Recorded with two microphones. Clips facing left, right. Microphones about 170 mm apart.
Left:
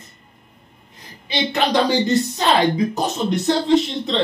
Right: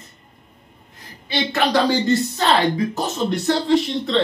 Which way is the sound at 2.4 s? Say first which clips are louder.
Left 2 dB; 15° left (ahead or behind).